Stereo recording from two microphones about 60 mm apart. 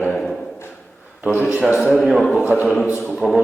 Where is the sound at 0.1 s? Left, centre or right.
Centre.